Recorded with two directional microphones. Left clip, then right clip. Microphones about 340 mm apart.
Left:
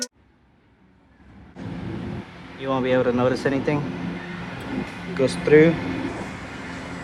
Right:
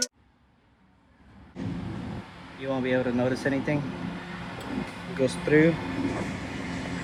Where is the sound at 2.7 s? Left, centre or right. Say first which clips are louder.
Left 6 dB; left.